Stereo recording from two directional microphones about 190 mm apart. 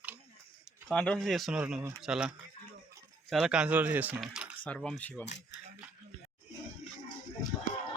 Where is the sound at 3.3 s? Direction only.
5° right (ahead or behind).